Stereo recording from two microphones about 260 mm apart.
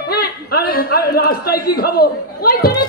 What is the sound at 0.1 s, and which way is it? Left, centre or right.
A man's voice, left.